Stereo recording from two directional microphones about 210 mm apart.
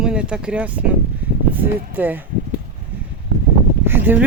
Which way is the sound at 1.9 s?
10° right (ahead or behind).